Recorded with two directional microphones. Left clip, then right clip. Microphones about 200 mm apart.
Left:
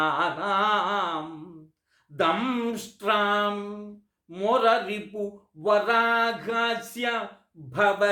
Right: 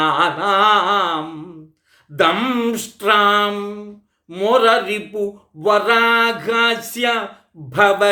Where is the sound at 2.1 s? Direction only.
15° right (ahead or behind).